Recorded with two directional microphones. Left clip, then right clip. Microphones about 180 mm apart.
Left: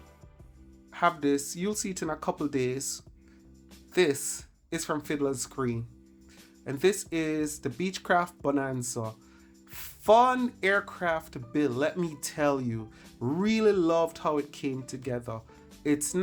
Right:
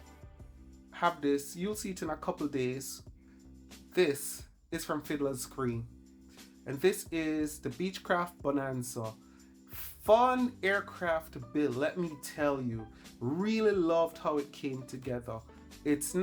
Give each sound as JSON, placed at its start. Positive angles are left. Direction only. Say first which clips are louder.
{"t": 0.9, "sound": "speech", "louder": "left 4 dB", "side_deg": 30}